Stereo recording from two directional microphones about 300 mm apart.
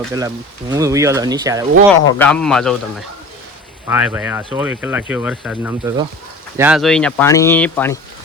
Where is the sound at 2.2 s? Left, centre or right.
Centre.